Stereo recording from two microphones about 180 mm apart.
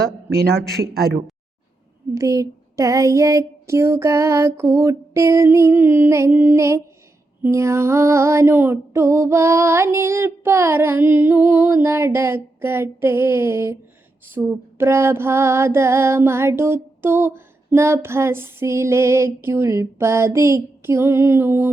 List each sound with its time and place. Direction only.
0.3 s a man's voice: 60° right (ahead or behind)
2.1 s female singing: 20° right (ahead or behind)